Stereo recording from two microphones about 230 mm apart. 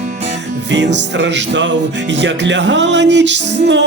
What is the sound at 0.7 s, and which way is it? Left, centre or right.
Music, right.